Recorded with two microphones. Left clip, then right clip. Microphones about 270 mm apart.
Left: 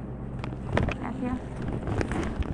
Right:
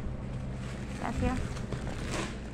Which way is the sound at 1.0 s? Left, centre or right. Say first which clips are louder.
Left 1 dB; right.